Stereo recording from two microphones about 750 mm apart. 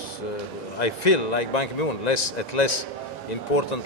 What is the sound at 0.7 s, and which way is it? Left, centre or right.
A man's voice, left.